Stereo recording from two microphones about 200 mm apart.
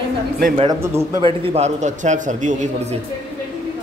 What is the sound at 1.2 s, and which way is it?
A man's voice, 30° right (ahead or behind).